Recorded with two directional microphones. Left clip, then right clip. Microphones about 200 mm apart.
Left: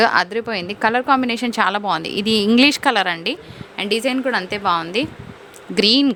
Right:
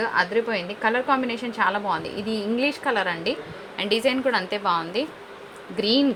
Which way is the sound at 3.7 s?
30° left (ahead or behind).